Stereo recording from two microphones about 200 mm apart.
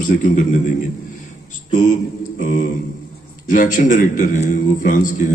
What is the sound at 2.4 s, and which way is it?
A man's voice, 40° left (ahead or behind).